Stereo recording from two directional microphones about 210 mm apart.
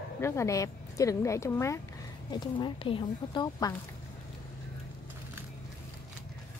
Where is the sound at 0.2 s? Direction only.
15° left (ahead or behind).